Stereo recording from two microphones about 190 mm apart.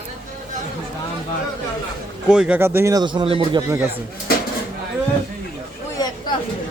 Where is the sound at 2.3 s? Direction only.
5° right (ahead or behind).